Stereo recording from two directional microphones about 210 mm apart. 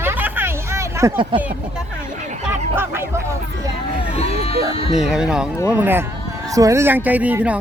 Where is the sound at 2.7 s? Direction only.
10° right (ahead or behind).